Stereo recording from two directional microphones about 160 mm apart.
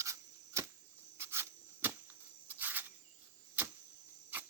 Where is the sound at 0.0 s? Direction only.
20° right (ahead or behind).